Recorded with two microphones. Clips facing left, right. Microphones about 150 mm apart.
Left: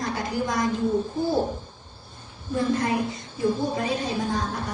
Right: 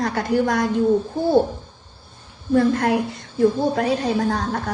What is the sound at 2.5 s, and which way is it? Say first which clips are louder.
A woman's voice: right 6 dB; 65° right (ahead or behind).